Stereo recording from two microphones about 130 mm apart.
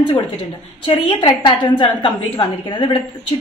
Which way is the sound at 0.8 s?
40° left (ahead or behind).